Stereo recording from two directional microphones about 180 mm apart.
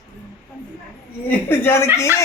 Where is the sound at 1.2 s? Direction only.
10° left (ahead or behind).